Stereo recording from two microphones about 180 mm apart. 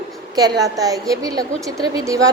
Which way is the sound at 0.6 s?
20° right (ahead or behind).